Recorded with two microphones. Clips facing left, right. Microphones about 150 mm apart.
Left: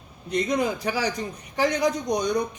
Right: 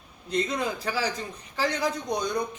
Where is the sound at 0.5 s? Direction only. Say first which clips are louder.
Left 4 dB; 20° left (ahead or behind).